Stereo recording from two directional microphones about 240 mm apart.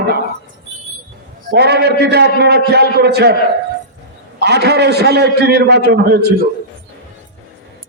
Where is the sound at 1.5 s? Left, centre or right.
Right.